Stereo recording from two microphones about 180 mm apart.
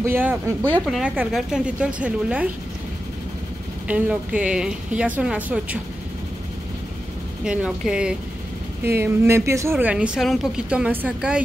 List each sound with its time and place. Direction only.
0.0 s a woman's voice: 10° right (ahead or behind)
3.8 s speech: 5° right (ahead or behind)
7.4 s a woman's voice: 5° right (ahead or behind)